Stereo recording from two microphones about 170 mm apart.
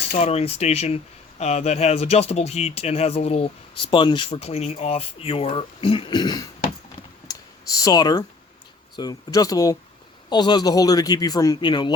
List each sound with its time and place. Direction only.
0.2 s speech: 40° left (ahead or behind)
7.3 s clicking: 20° left (ahead or behind)
9.0 s a man's voice: 20° left (ahead or behind)